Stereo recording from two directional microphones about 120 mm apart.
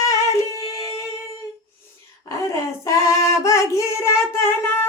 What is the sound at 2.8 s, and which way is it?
Singing, 25° left (ahead or behind).